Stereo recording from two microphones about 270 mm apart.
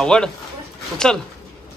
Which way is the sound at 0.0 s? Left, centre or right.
Centre.